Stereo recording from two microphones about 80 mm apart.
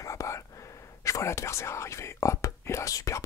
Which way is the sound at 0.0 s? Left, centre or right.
Left.